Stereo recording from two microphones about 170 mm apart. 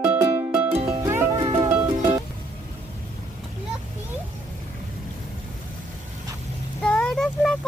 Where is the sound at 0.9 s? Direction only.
25° right (ahead or behind).